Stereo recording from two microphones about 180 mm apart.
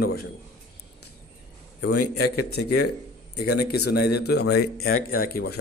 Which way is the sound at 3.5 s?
65° left (ahead or behind).